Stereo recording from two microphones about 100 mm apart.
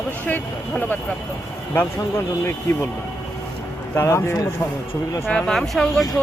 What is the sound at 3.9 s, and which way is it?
Speech, 30° left (ahead or behind).